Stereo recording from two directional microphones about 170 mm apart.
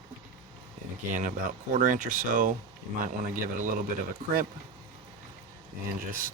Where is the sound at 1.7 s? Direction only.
50° right (ahead or behind).